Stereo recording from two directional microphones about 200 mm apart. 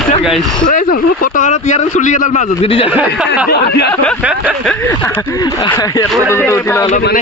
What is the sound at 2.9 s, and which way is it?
Speech, 5° right (ahead or behind).